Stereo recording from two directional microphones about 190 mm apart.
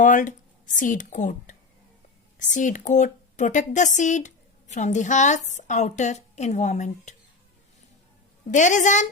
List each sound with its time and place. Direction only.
0.0 s a woman's voice: 40° left (ahead or behind)
8.4 s a woman's voice: 40° left (ahead or behind)